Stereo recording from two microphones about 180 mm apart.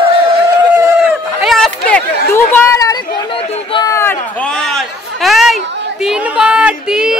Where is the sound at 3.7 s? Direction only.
20° left (ahead or behind).